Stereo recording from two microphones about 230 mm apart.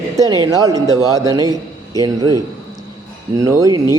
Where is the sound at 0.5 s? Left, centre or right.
Centre.